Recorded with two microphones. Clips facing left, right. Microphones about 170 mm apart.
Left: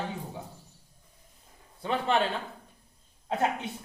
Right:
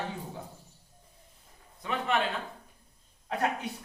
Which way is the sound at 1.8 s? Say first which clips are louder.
Left 3 dB; 30° left (ahead or behind).